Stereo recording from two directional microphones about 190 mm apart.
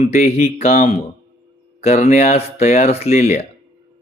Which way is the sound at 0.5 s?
35° left (ahead or behind).